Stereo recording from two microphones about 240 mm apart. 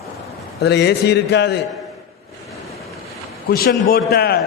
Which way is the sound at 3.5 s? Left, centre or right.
Left.